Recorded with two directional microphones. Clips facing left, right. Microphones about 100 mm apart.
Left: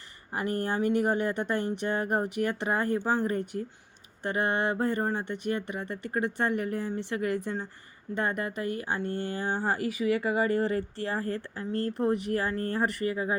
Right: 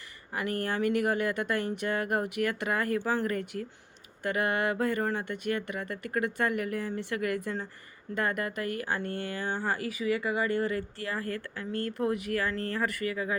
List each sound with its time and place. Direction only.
0.3 s speech: 30° left (ahead or behind)